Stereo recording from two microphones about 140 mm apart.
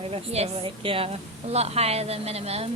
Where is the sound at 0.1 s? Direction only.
45° right (ahead or behind).